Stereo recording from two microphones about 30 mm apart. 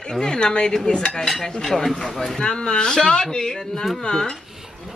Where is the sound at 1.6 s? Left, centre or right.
Centre.